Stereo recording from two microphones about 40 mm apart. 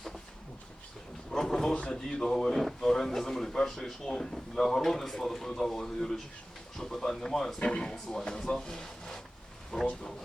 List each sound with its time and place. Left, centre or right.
1.3 s a man's voice: centre
7.6 s speech: left
7.9 s a man's voice: centre